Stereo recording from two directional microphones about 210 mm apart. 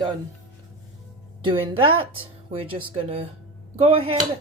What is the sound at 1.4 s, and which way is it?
Speech, 25° right (ahead or behind).